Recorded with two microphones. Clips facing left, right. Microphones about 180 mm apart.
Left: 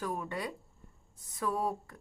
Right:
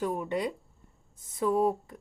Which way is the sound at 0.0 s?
20° right (ahead or behind).